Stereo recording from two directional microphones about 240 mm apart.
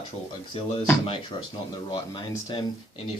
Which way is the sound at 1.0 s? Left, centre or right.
Left.